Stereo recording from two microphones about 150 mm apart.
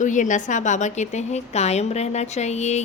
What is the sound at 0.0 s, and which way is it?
A woman's voice, 55° left (ahead or behind).